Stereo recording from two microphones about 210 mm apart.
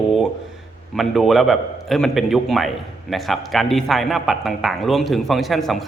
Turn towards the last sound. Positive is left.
turn(degrees=0)  # may be behind; listen again after turning